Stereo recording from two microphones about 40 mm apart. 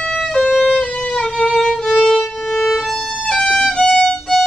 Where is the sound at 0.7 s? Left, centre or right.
Centre.